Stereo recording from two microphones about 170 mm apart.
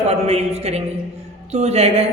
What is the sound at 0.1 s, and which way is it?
A man's voice, 40° right (ahead or behind).